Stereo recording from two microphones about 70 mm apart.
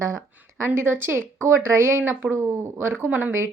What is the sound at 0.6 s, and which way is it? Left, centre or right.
Speech, right.